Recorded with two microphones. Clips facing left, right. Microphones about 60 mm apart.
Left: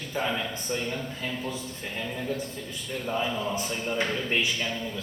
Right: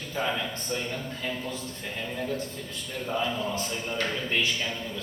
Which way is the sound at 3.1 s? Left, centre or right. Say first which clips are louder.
Even; centre.